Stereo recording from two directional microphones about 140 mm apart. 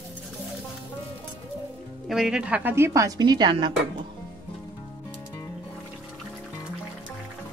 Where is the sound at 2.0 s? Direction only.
5° right (ahead or behind); by 3.7 s 30° right (ahead or behind).